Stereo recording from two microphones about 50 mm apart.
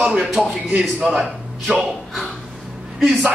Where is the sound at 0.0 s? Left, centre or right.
Right.